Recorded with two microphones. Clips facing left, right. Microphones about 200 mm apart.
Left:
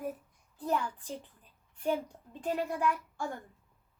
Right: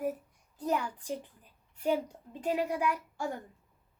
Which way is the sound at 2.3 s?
10° right (ahead or behind).